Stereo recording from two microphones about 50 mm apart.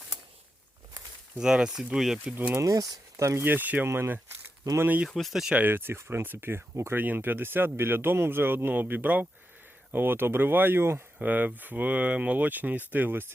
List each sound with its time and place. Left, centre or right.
1.4 s speech: centre
3.2 s speech: right
3.4 s speech: right
3.8 s speech: right
4.7 s speech: right
5.0 s speech: centre
5.3 s speech: centre
5.5 s speech: right
11.2 s speech: right